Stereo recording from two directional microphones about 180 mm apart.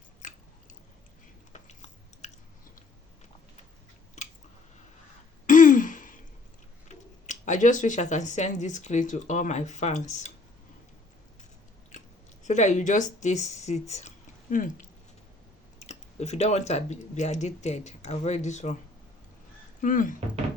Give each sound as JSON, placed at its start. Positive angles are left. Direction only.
{"t": 0.2, "sound": "biting", "side_deg": 45}
{"t": 1.5, "sound": "chewing", "side_deg": 40}
{"t": 5.5, "sound": "throat clearing", "side_deg": 45}
{"t": 6.8, "sound": "speech", "side_deg": 40}
{"t": 12.5, "sound": "speech", "side_deg": 40}
{"t": 19.8, "sound": "speech", "side_deg": 45}